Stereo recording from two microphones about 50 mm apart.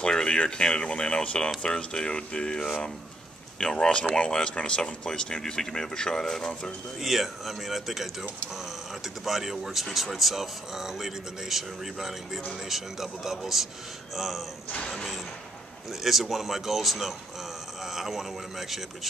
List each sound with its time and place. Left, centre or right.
0.0 s speech: centre
7.0 s speech: centre
15.9 s speech: centre